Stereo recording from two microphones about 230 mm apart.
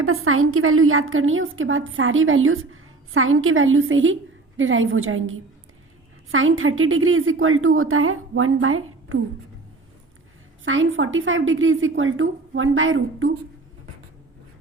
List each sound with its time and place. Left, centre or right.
0.0 s a woman's voice: right
10.7 s a woman's voice: right